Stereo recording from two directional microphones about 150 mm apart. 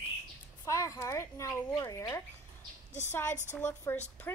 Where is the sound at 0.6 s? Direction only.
20° left (ahead or behind).